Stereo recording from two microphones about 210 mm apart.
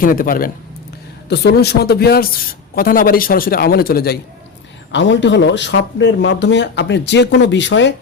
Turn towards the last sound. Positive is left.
turn(degrees=60)  # may be behind; listen again after turning